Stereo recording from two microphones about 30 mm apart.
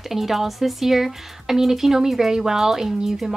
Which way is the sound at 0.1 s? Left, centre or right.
Centre.